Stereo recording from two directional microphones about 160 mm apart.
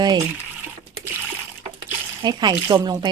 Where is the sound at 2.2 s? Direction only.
25° right (ahead or behind).